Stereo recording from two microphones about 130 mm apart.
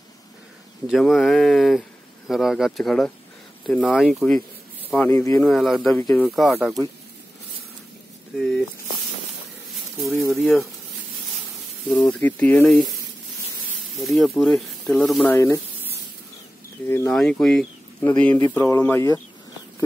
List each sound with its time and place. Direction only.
0.8 s speech: centre (ahead or behind)
4.9 s speech: 20° left (ahead or behind)
5.4 s speech: 5° left (ahead or behind)
5.9 s speech: 20° left (ahead or behind)
6.2 s speech: centre (ahead or behind)
8.4 s speech: centre (ahead or behind)
10.3 s speech: centre (ahead or behind)
11.9 s speech: 15° left (ahead or behind)
12.6 s speech: centre (ahead or behind)
13.9 s speech: centre (ahead or behind)
15.2 s speech: 20° left (ahead or behind)
17.1 s speech: 5° left (ahead or behind)